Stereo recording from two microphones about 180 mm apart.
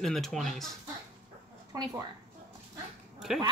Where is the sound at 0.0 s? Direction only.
Centre (ahead or behind).